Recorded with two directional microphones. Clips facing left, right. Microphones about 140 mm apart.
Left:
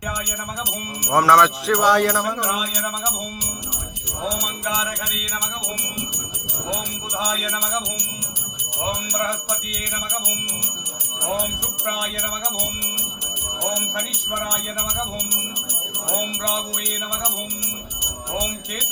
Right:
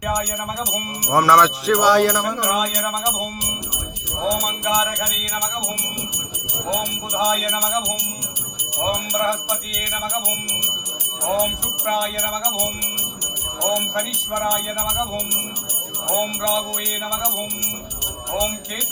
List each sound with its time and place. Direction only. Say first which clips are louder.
1.0 s jingle bell: even; centre (ahead or behind)
2.5 s music: right 4 dB; 50° right (ahead or behind)
4.4 s music: right 5 dB; 50° right (ahead or behind)
7.2 s music: right 6 dB; 50° right (ahead or behind)